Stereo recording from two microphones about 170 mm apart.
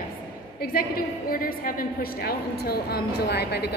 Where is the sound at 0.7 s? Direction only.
60° left (ahead or behind).